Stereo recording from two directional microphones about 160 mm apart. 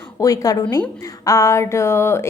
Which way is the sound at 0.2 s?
20° left (ahead or behind).